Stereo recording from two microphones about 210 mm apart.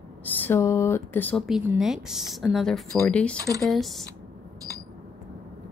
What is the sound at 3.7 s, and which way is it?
Speech, centre (ahead or behind).